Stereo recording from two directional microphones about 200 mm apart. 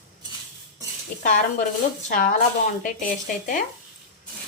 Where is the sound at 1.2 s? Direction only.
40° left (ahead or behind).